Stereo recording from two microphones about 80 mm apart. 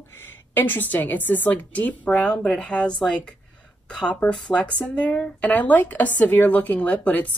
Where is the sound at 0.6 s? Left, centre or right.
Left.